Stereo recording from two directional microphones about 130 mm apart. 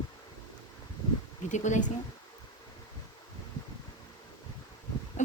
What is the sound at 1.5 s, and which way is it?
Speech, 70° left (ahead or behind).